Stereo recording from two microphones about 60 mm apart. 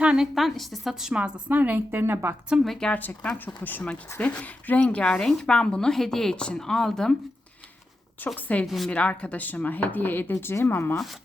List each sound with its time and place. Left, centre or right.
0.0 s a woman's voice: centre
0.3 s a woman's voice: centre
1.1 s a woman's voice: centre
1.5 s a woman's voice: right
2.6 s speech: centre
2.9 s speech: left; by 7.2 s centre
8.4 s speech: left
8.6 s a woman's voice: centre
8.9 s speech: left